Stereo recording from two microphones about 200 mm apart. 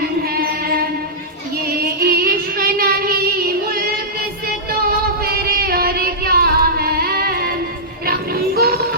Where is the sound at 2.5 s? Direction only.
50° right (ahead or behind).